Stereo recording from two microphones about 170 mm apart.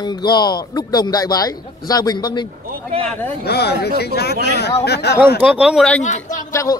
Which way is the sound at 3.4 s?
70° left (ahead or behind).